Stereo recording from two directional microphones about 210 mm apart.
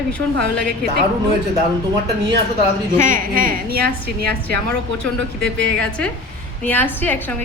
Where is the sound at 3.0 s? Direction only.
40° right (ahead or behind).